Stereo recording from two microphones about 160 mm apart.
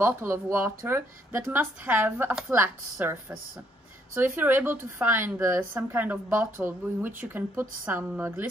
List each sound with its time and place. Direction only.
0.0 s speech: 15° right (ahead or behind)